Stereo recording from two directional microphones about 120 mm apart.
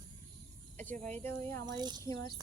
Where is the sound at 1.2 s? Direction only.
20° left (ahead or behind).